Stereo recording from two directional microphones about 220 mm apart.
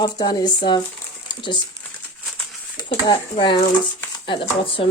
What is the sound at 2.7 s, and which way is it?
Speech, 20° left (ahead or behind).